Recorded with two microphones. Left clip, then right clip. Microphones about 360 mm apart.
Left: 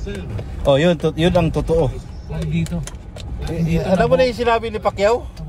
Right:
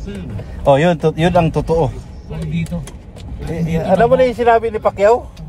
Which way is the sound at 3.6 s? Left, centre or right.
Centre.